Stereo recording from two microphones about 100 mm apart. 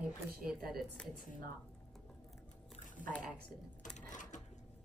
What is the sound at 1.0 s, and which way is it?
Speech, 10° left (ahead or behind).